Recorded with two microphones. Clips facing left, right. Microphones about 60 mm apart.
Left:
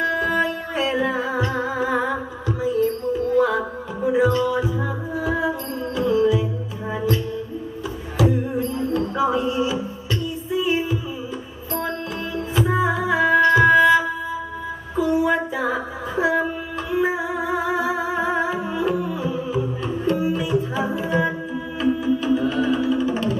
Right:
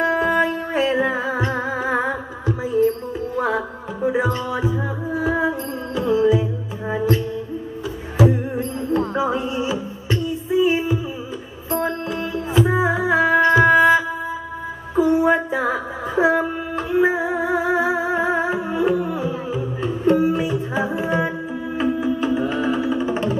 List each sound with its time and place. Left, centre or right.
0.0 s music: right
8.2 s music: right
15.0 s a sound: right
18.3 s music: right